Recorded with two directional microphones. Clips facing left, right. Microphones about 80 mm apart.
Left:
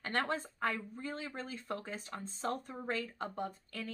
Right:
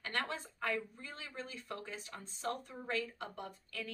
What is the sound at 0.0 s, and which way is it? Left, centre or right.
Speech, left.